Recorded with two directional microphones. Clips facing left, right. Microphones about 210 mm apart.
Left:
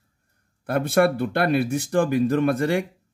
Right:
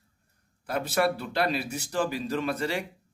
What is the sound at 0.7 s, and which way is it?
Speech, 55° left (ahead or behind).